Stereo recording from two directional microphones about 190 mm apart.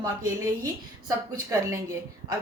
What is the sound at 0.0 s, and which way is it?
A woman's voice, 20° right (ahead or behind).